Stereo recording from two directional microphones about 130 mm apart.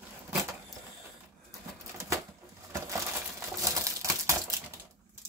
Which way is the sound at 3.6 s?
25° right (ahead or behind).